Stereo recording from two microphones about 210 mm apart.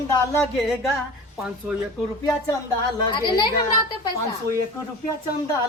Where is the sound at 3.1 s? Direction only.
25° left (ahead or behind).